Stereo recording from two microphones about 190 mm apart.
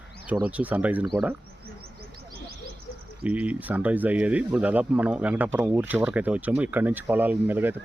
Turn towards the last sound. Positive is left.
turn(degrees=-10)  # may be behind; listen again after turning